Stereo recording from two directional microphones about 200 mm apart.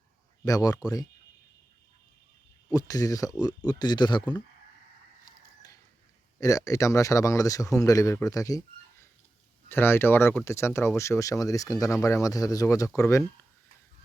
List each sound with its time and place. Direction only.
0.4 s speech: 15° left (ahead or behind)
2.6 s speech: 15° left (ahead or behind)
6.4 s speech: 15° left (ahead or behind)